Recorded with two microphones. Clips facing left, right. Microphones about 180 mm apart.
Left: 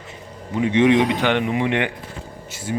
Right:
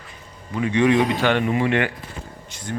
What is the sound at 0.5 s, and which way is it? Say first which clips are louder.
Speech: left 2 dB; 20° left (ahead or behind).